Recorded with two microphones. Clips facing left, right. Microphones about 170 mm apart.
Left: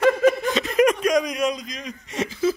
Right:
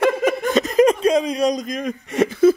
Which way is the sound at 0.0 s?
50° right (ahead or behind).